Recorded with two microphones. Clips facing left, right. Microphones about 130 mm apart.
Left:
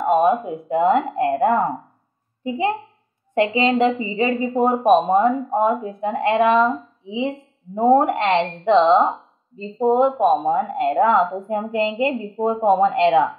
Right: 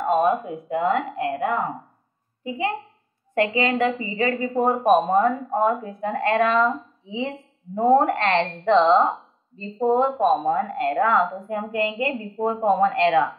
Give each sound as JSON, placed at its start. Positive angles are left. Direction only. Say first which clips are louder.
{"t": 0.0, "sound": "a woman's voice", "louder": "left 3 dB", "side_deg": 20}
{"t": 2.4, "sound": "a woman's voice", "louder": "left 4 dB", "side_deg": 30}